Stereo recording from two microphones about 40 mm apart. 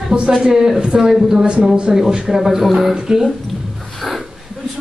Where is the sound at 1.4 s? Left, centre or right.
Right.